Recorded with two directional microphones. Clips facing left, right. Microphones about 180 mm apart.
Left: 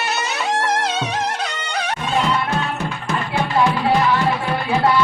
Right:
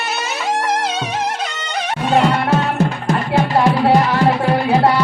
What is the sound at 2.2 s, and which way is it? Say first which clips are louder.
Music: right 5 dB; 60° right (ahead or behind).